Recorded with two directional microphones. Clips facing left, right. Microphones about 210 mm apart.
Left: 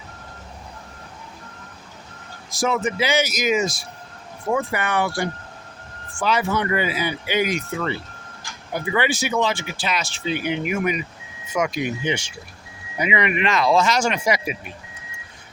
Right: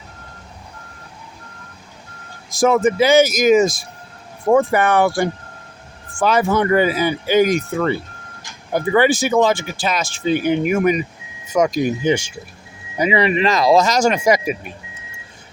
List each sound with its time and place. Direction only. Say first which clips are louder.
2.6 s speech: right 8 dB; 50° right (ahead or behind)